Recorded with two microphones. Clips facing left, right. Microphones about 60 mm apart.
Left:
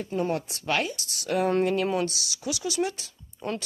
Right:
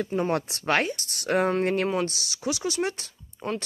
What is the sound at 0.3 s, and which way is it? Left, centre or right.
Speech, right.